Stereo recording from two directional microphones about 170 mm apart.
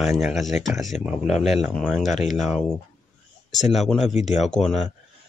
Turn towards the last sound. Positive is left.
turn(degrees=5)  # may be behind; listen again after turning